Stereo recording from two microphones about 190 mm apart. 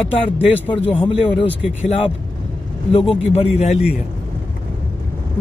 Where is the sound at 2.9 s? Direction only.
30° left (ahead or behind).